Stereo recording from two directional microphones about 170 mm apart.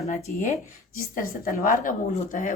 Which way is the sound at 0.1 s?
45° left (ahead or behind).